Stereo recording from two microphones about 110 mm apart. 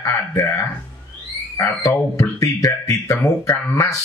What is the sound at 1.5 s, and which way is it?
Speech, 20° left (ahead or behind).